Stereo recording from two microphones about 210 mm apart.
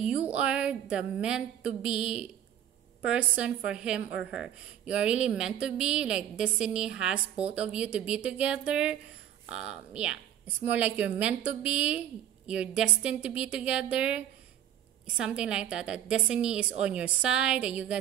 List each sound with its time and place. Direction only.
0.0 s a woman's voice: 5° right (ahead or behind)